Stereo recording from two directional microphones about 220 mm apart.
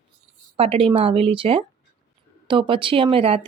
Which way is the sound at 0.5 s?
25° right (ahead or behind).